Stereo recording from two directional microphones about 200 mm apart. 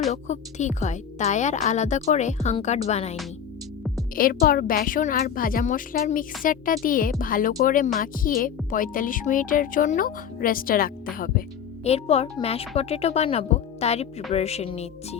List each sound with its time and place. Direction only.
0.1 s a woman's voice: 35° left (ahead or behind)
4.1 s speech: 45° left (ahead or behind)
11.8 s a woman's voice: 30° left (ahead or behind)